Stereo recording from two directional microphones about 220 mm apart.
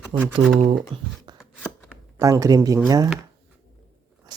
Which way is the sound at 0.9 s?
20° right (ahead or behind).